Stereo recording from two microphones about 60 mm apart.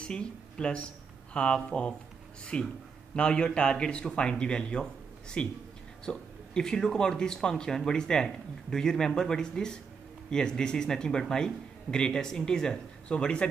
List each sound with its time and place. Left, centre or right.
0.0 s speech: centre